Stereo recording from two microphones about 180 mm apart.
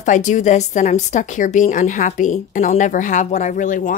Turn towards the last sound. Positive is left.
turn(degrees=45)  # may be behind; listen again after turning